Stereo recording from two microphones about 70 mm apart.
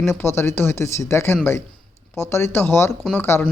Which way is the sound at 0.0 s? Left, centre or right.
Left.